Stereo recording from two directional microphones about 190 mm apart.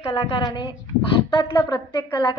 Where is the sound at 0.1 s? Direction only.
25° left (ahead or behind).